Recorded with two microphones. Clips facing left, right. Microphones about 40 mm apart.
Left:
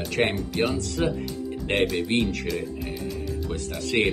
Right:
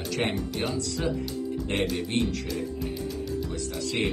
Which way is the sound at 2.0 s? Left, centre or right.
Left.